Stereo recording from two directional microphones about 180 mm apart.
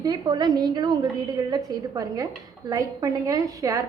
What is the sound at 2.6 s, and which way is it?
A woman's voice, 20° right (ahead or behind).